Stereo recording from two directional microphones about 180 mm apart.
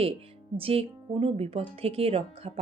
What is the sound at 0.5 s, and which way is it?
A woman's voice, 30° right (ahead or behind).